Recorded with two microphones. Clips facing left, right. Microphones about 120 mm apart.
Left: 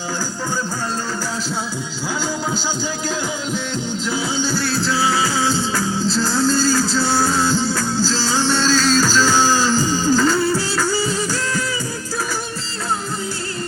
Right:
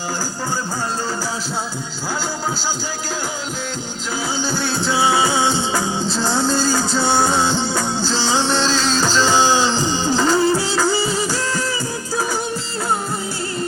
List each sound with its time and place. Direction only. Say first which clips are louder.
4.9 s music: right 4 dB; 25° right (ahead or behind)